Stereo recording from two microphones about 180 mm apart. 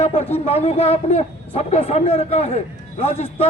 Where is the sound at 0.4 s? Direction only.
35° left (ahead or behind).